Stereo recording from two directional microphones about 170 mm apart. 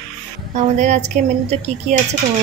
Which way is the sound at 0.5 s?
45° right (ahead or behind).